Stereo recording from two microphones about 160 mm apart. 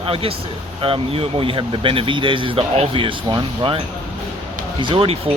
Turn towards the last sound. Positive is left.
turn(degrees=-35)  # may be behind; listen again after turning